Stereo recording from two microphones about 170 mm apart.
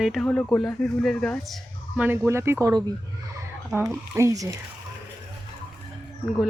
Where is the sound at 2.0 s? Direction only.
15° right (ahead or behind).